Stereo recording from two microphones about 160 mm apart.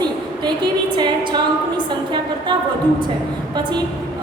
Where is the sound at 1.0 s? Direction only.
30° right (ahead or behind).